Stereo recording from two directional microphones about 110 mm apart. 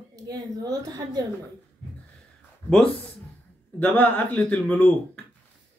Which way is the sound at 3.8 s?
15° left (ahead or behind).